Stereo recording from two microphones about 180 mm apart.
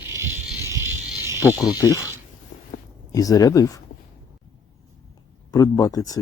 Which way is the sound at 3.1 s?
20° left (ahead or behind).